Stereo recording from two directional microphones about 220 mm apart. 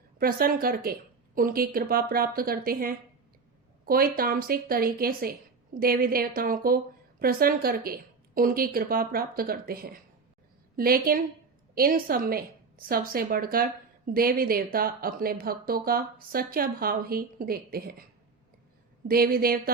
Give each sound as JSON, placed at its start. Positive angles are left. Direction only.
{"t": 0.2, "sound": "a woman's voice", "side_deg": -40}
{"t": 19.0, "sound": "speech", "side_deg": -40}